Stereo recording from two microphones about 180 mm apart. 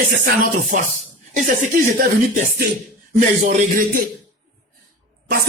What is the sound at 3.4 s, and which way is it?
Music, 45° right (ahead or behind).